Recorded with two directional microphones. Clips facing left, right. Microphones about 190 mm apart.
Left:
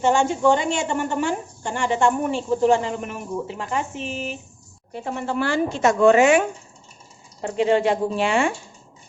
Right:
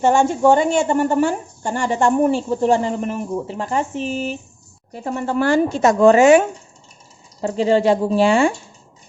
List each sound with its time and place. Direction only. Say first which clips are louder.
0.0 s a woman's voice: right 3 dB; 45° right (ahead or behind)
7.4 s a woman's voice: right 3 dB; 35° right (ahead or behind)